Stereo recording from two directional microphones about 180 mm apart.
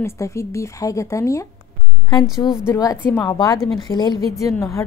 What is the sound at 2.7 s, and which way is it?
A woman's voice, 20° left (ahead or behind).